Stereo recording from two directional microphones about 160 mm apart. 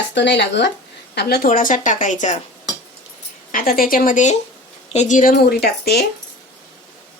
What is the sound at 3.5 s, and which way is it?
A woman's voice, 65° left (ahead or behind).